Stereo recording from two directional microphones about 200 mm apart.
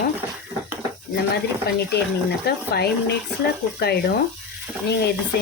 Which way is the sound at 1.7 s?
55° left (ahead or behind).